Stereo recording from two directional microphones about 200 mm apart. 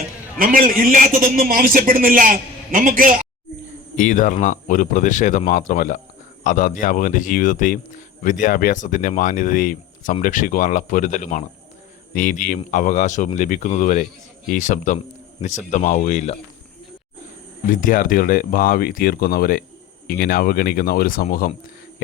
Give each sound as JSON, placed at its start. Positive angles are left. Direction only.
{"t": 0.3, "sound": "a man's voice", "side_deg": -45}
{"t": 3.9, "sound": "speech", "side_deg": 40}
{"t": 17.7, "sound": "speech", "side_deg": 45}